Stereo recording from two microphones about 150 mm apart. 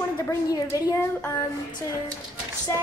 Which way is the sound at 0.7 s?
25° left (ahead or behind).